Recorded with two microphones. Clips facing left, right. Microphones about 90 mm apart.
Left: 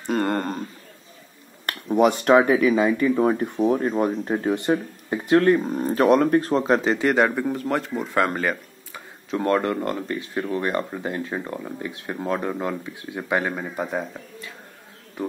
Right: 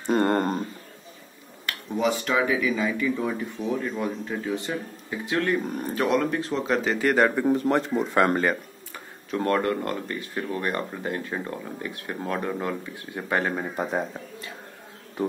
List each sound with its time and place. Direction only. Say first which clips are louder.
0.1 s a sound: right 1 dB; 10° right (ahead or behind)
1.7 s speech: left 6 dB; 55° left (ahead or behind); by 7.0 s 35° left (ahead or behind)
7.0 s speech: left 2 dB; 15° left (ahead or behind)
7.4 s speech: right 3 dB; 5° right (ahead or behind)
9.3 s speech: left 2 dB; 20° left (ahead or behind)
13.5 s speech: even; centre (ahead or behind)